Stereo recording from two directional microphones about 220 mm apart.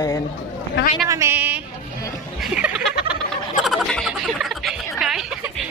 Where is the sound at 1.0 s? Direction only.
15° right (ahead or behind).